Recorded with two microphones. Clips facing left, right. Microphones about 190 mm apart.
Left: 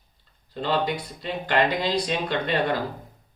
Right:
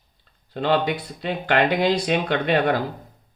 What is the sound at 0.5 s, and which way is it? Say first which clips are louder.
A man's voice: right 4 dB; 65° right (ahead or behind).